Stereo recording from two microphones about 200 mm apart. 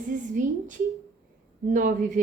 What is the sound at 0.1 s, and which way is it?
A woman's voice, 40° right (ahead or behind).